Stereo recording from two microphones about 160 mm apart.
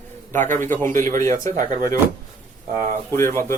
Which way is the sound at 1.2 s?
20° left (ahead or behind).